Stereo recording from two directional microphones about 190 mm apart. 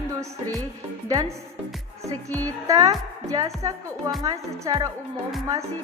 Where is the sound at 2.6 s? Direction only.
15° right (ahead or behind).